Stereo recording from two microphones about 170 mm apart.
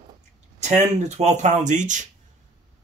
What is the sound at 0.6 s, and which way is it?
Speech, 45° right (ahead or behind).